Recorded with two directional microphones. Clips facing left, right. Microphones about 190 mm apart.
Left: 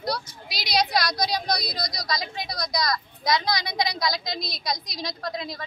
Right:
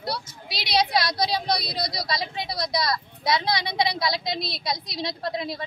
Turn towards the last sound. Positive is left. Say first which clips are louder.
# right 3 dB
turn(degrees=-25)  # may be behind; listen again after turning